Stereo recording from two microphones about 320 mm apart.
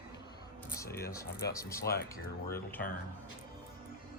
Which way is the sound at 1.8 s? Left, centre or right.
Left.